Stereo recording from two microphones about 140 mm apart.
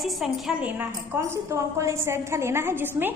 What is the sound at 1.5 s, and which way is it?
A woman's voice, 20° right (ahead or behind).